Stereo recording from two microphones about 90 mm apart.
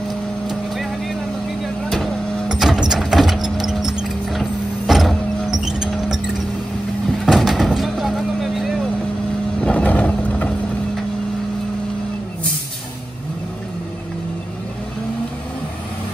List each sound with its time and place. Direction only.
1.6 s a sound: centre (ahead or behind)
3.4 s music: 5° right (ahead or behind)
7.2 s vehicle: centre (ahead or behind)
9.6 s vehicle: 15° left (ahead or behind)